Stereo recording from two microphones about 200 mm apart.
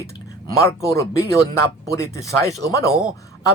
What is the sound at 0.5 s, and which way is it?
A man's voice, 15° left (ahead or behind).